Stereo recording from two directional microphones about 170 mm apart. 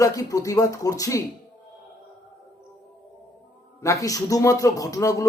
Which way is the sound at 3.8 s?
20° left (ahead or behind).